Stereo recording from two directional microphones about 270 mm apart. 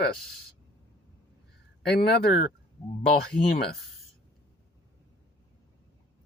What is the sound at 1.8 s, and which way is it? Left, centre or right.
Speech, left.